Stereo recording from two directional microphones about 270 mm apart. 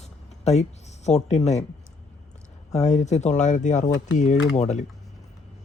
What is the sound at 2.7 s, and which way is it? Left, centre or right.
Speech, left.